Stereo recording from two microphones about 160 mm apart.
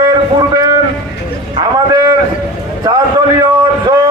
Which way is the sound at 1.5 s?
25° right (ahead or behind).